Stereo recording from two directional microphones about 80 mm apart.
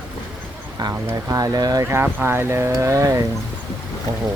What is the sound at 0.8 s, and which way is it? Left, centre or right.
Speech, right.